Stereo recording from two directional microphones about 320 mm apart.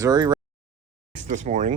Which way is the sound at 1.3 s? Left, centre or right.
Right.